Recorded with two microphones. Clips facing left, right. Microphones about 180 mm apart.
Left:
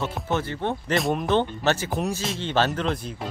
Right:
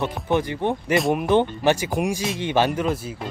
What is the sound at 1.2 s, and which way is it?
Speech, 15° right (ahead or behind).